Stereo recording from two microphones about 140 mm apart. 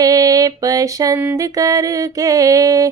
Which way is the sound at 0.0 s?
25° right (ahead or behind).